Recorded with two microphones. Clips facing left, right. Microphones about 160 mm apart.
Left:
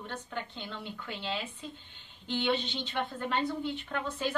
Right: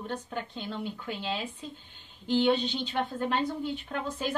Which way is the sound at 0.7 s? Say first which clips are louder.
Right 7 dB; 40° right (ahead or behind).